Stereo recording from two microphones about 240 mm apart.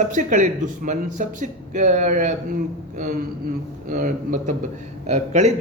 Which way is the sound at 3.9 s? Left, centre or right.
Right.